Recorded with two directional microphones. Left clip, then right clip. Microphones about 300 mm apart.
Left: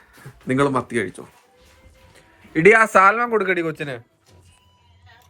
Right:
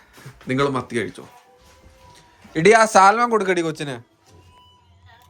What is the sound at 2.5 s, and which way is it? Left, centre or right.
A man's voice, centre.